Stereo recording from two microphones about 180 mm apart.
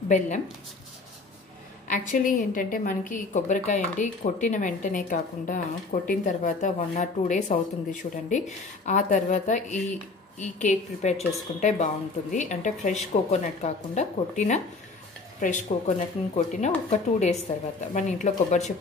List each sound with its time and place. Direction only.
1.9 s a woman's voice: 45° left (ahead or behind)